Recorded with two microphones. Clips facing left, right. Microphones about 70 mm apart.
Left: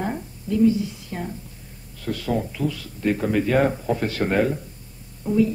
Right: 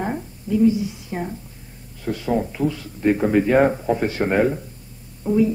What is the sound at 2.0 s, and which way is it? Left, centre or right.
A man's voice, centre.